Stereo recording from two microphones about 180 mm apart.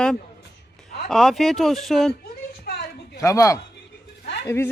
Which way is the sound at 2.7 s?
60° left (ahead or behind).